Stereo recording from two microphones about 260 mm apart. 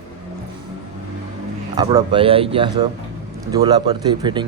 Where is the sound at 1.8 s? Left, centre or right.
Centre.